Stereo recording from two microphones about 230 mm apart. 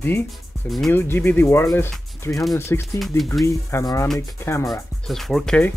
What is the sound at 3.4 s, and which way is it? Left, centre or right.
Speech, centre.